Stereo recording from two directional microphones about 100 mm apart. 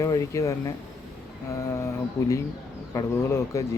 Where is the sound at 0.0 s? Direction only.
30° left (ahead or behind).